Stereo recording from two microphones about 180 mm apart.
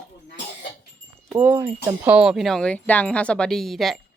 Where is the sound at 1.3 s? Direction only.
15° right (ahead or behind).